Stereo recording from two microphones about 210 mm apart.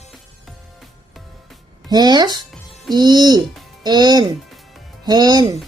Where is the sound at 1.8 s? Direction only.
20° right (ahead or behind).